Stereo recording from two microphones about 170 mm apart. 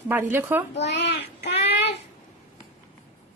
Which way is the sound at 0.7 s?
90° left.